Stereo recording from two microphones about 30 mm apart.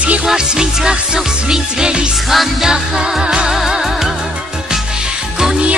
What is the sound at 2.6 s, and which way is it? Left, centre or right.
Music, right.